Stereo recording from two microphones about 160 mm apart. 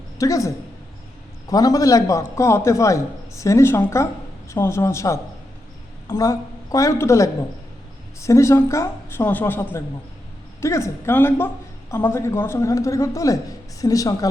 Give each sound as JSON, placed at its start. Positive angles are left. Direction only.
{"t": 0.2, "sound": "a man's voice", "side_deg": 20}